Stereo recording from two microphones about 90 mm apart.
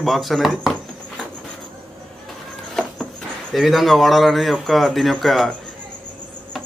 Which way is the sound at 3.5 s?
Centre (ahead or behind).